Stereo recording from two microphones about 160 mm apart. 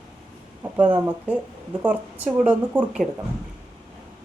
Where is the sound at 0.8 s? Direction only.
10° right (ahead or behind).